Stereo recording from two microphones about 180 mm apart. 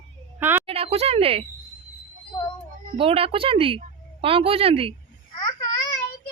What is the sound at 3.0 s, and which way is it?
Speech, 30° right (ahead or behind).